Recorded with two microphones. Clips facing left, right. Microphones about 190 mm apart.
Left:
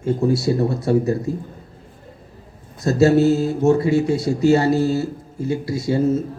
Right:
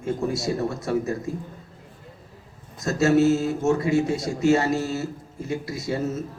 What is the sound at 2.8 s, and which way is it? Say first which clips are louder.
Speech: left 4 dB; 35° left (ahead or behind).